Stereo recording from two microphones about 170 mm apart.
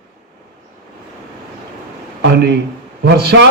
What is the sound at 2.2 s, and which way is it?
Speech, 75° right (ahead or behind).